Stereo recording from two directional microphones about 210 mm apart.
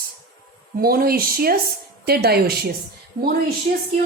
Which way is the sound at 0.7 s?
45° right (ahead or behind).